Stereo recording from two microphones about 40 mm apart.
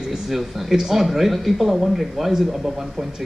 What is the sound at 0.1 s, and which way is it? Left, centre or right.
Speech, centre.